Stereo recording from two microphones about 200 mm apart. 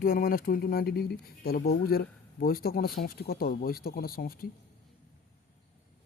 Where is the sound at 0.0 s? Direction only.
45° left (ahead or behind).